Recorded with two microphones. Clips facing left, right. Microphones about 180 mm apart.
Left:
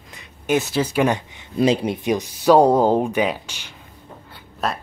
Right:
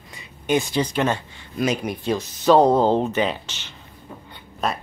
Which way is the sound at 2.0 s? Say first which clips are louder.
Left 1 dB; 15° left (ahead or behind).